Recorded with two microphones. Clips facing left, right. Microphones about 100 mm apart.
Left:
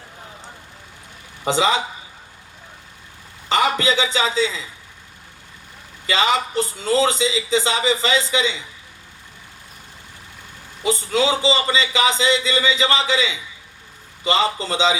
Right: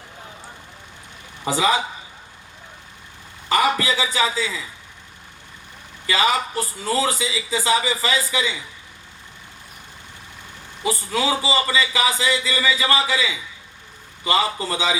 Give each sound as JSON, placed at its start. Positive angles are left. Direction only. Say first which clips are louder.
{"t": 1.5, "sound": "a man's voice", "louder": "left 1 dB", "side_deg": 25}
{"t": 3.5, "sound": "a man's voice", "louder": "left 1 dB", "side_deg": 25}
{"t": 6.1, "sound": "a man's voice", "louder": "left 1 dB", "side_deg": 25}
{"t": 10.8, "sound": "a man's voice", "louder": "left 3 dB", "side_deg": 25}